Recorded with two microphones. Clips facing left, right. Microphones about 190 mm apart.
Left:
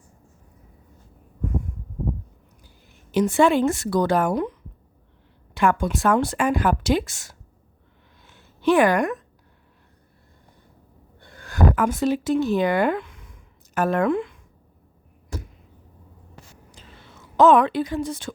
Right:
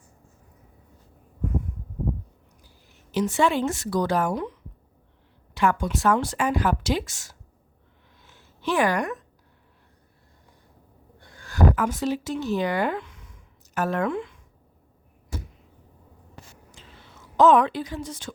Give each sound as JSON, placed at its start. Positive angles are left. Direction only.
{"t": 2.6, "sound": "speech", "side_deg": 55}
{"t": 5.5, "sound": "speech", "side_deg": 55}
{"t": 8.2, "sound": "a sound", "side_deg": 55}
{"t": 11.3, "sound": "a woman's voice", "side_deg": 55}
{"t": 17.3, "sound": "speech", "side_deg": 60}